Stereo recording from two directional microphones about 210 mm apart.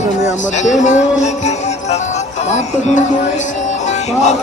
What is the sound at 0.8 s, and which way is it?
Music, 35° left (ahead or behind).